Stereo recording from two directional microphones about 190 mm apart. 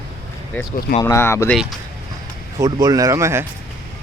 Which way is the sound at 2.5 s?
20° right (ahead or behind).